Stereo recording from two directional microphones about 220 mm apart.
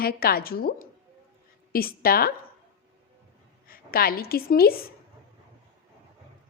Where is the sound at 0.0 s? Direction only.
45° left (ahead or behind).